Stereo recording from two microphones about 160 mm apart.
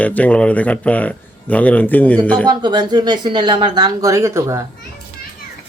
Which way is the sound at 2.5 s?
25° right (ahead or behind).